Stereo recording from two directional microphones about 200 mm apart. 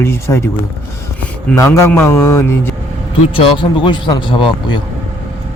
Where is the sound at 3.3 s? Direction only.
25° left (ahead or behind).